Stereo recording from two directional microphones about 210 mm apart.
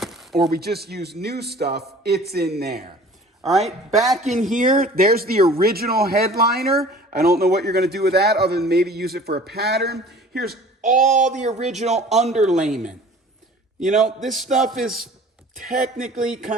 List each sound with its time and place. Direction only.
0.0 s a sound: centre (ahead or behind)
0.5 s speech: 50° right (ahead or behind)
3.5 s speech: centre (ahead or behind)
4.2 s speech: 35° right (ahead or behind)
14.3 s speech: centre (ahead or behind)
16.1 s speech: 40° right (ahead or behind)